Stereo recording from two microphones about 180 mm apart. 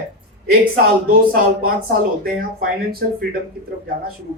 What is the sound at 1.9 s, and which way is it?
Speech, 55° right (ahead or behind).